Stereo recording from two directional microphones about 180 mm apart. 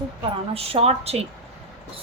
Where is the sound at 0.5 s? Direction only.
35° right (ahead or behind).